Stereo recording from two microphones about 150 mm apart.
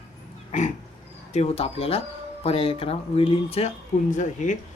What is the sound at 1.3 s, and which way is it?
Speech, 45° left (ahead or behind).